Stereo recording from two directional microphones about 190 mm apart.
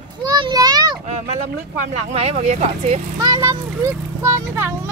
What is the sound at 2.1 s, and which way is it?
Speech, 35° right (ahead or behind).